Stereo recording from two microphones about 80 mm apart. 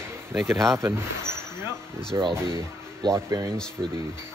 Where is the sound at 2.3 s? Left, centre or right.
Right.